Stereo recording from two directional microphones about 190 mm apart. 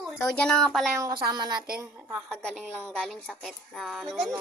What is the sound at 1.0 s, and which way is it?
Speech, 20° right (ahead or behind).